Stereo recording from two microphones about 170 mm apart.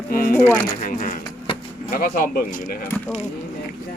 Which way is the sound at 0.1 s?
55° left (ahead or behind).